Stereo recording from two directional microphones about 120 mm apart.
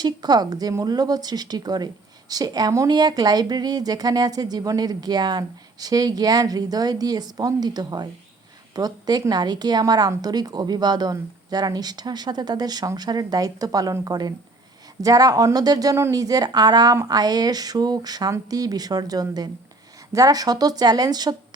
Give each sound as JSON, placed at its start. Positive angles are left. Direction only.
{"t": 0.0, "sound": "speech", "side_deg": -35}